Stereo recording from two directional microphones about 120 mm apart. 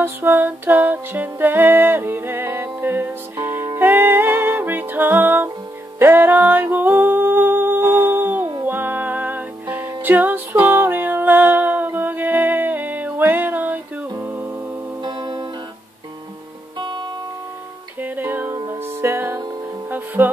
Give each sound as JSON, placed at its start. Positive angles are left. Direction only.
{"t": 0.0, "sound": "music", "side_deg": -15}
{"t": 15.0, "sound": "music", "side_deg": -40}
{"t": 18.0, "sound": "music", "side_deg": -15}